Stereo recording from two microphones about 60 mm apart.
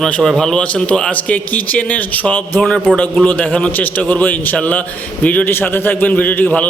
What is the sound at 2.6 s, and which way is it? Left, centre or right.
Speech, centre.